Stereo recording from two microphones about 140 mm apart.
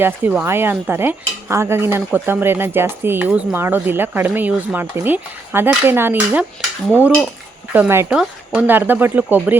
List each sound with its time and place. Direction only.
0.0 s speech: 15° right (ahead or behind)
7.7 s speech: 15° right (ahead or behind)